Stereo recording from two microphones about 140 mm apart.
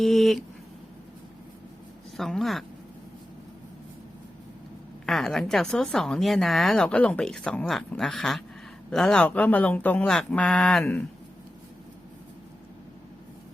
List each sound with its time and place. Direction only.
0.0 s speech: centre (ahead or behind)
2.1 s speech: centre (ahead or behind)
5.0 s speech: 5° left (ahead or behind)